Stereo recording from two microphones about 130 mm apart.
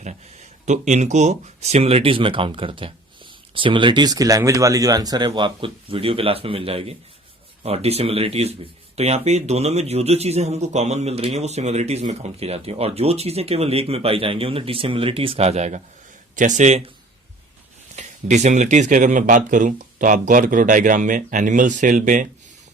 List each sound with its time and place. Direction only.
0.6 s speech: 65° right (ahead or behind)
16.3 s a man's voice: 75° right (ahead or behind)
17.9 s speech: 60° right (ahead or behind); by 22.3 s 85° right